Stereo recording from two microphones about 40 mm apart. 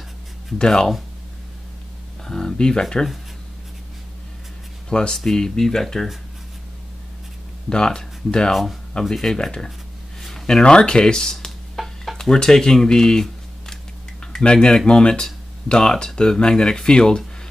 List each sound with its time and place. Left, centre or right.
0.6 s speech: centre
2.2 s speech: centre
4.8 s speech: centre
7.7 s speech: centre
9.0 s speech: centre
9.3 s speech: centre
10.8 s a sound: left
14.4 s speech: left